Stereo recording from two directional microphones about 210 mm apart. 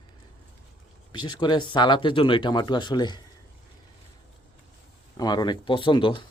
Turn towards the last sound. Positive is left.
turn(degrees=25)  # may be behind; listen again after turning